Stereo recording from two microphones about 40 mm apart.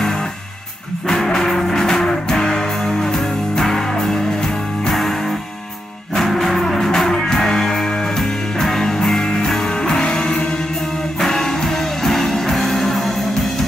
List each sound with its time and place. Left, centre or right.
1.0 s music: centre
6.1 s music: centre